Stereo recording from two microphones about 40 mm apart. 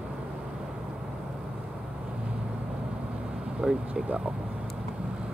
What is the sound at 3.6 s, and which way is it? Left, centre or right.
Speech, centre.